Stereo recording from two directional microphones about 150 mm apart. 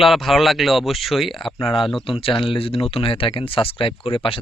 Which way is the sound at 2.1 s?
35° left (ahead or behind).